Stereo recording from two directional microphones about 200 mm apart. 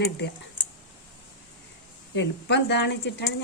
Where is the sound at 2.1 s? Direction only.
60° left (ahead or behind).